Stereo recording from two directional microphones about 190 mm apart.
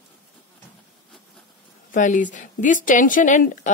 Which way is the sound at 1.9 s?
40° left (ahead or behind).